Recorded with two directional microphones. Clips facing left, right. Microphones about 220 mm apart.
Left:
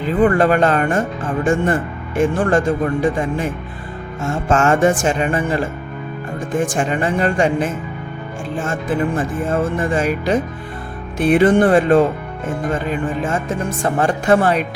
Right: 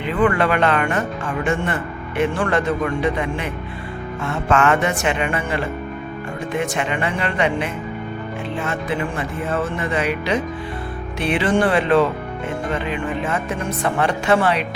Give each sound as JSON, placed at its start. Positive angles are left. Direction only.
{"t": 0.0, "sound": "speech", "side_deg": 40}